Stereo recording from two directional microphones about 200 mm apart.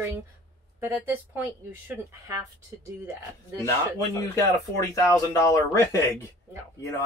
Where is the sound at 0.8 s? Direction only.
10° right (ahead or behind).